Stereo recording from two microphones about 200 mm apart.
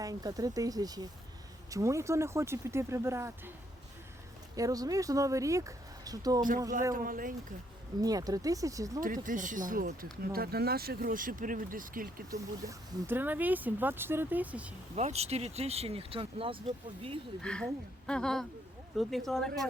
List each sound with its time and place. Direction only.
0.0 s speech: 20° right (ahead or behind)
4.5 s speech: 15° right (ahead or behind)
6.9 s speech: 45° right (ahead or behind)
8.0 s speech: 20° right (ahead or behind)
9.0 s speech: 40° right (ahead or behind)
12.3 s speech: 15° right (ahead or behind)
14.9 s speech: 35° right (ahead or behind)
17.4 s speech: 5° left (ahead or behind)